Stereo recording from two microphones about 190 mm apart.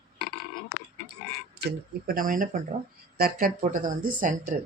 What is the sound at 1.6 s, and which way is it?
Speech, 50° right (ahead or behind).